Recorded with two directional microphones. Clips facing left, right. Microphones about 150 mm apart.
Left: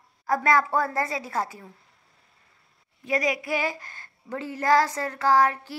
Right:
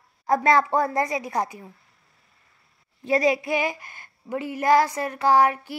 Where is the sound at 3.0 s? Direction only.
30° right (ahead or behind); by 5.7 s 15° right (ahead or behind).